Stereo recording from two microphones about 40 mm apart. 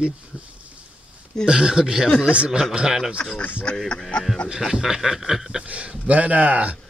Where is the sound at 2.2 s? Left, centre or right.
Right.